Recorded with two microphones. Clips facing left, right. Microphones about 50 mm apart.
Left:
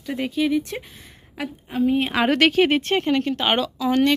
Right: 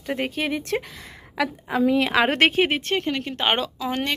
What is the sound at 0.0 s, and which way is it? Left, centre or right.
Speech, right.